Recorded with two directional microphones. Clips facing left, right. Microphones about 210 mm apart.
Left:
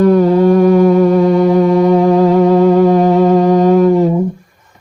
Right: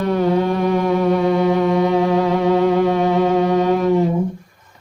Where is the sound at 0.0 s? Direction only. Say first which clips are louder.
Left 8 dB; 45° left (ahead or behind).